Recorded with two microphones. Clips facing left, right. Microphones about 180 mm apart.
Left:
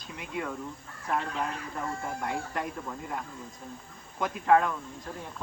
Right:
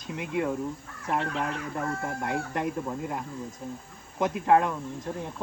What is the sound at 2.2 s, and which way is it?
Speech, 20° right (ahead or behind).